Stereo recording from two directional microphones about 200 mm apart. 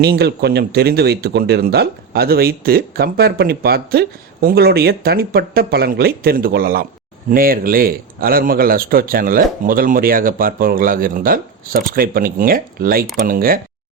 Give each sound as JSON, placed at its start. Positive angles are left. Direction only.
{"t": 0.0, "sound": "speech", "side_deg": -55}